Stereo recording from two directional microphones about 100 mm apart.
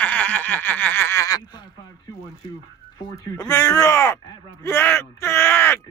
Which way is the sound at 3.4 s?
35° left (ahead or behind).